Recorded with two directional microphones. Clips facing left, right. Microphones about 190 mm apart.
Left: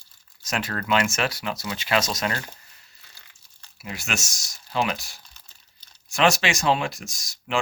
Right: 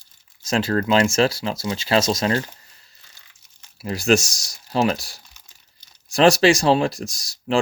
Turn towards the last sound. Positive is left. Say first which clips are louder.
# right 7 dB
turn(degrees=-35)  # may be behind; listen again after turning